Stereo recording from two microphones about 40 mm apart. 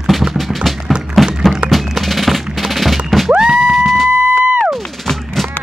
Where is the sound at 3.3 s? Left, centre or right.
Right.